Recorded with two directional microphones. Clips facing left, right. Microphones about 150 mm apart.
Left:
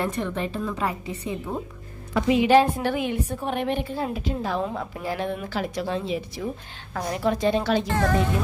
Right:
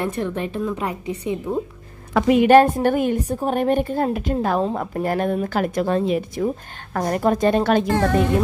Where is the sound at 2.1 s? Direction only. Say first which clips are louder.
Right 5 dB; 55° right (ahead or behind).